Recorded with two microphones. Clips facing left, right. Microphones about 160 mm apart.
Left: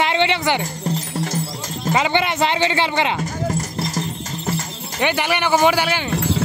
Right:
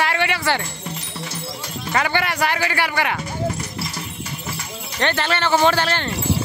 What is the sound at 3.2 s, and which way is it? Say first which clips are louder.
Music: left 2 dB; 45° left (ahead or behind).